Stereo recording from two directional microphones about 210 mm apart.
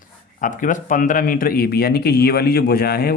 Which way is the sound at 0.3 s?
40° left (ahead or behind).